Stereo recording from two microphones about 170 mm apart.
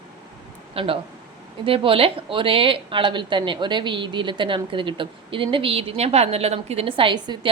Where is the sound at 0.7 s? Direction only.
35° right (ahead or behind).